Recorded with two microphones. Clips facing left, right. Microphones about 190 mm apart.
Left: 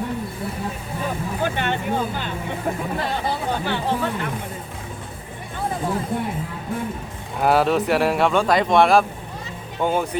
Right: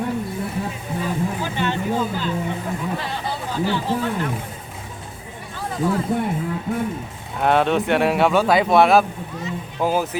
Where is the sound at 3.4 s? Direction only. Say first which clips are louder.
Right 4 dB; 60° left (ahead or behind).